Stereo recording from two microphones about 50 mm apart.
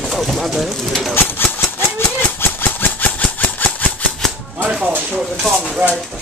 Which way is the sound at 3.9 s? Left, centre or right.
Left.